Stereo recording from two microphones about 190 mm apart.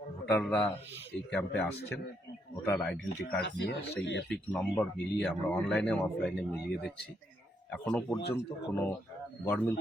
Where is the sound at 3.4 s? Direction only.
65° left (ahead or behind).